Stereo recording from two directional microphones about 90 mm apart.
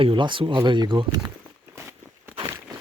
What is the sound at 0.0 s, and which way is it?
Speech, 65° right (ahead or behind).